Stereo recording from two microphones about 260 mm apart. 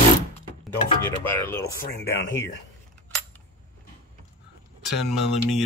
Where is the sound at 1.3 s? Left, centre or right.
Centre.